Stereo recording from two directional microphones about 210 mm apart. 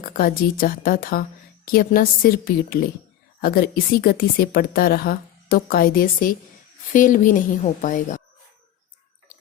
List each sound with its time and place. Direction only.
0.0 s a woman's voice: 45° left (ahead or behind)